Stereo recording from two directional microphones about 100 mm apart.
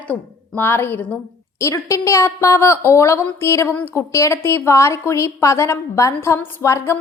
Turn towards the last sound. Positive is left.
turn(degrees=30)  # may be behind; listen again after turning